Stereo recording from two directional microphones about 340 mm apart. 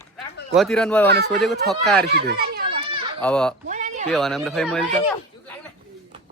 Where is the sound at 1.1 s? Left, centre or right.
Right.